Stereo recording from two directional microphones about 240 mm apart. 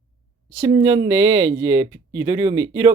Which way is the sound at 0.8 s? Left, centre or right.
Centre.